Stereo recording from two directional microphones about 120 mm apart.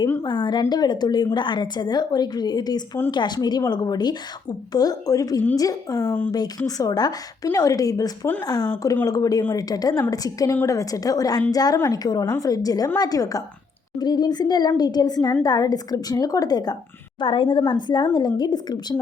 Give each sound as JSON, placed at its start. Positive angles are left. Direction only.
{"t": 0.2, "sound": "a woman's voice", "side_deg": 40}
{"t": 17.2, "sound": "a woman's voice", "side_deg": 45}